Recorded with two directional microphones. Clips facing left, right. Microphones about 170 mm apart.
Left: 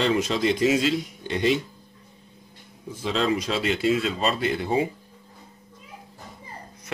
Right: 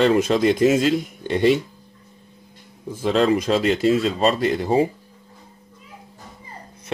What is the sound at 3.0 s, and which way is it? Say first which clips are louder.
Speech: right 6 dB; 50° right (ahead or behind).